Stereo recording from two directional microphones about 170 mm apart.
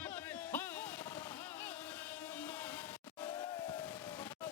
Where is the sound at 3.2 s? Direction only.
20° left (ahead or behind).